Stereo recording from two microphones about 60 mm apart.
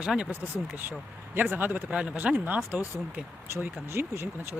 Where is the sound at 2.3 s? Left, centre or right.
Right.